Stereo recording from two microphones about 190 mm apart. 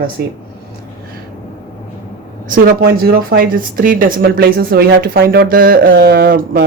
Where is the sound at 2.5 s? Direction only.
50° right (ahead or behind).